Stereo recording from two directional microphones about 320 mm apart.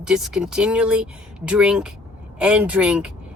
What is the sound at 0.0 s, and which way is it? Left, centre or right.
Speech, centre.